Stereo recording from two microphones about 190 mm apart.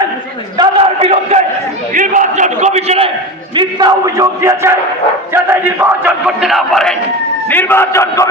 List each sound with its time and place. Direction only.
0.5 s a sound: 25° right (ahead or behind)
3.5 s a man's voice: 25° right (ahead or behind); by 6.9 s centre (ahead or behind)
7.5 s a man's voice: 10° left (ahead or behind)